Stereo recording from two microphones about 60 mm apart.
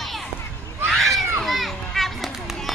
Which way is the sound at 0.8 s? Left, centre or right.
Centre.